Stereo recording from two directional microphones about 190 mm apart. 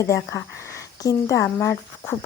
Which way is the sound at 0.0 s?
15° left (ahead or behind).